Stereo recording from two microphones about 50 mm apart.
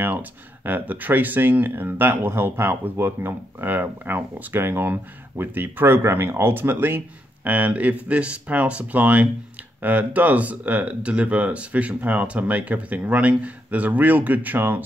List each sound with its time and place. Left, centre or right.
0.1 s speech: right
7.4 s speech: right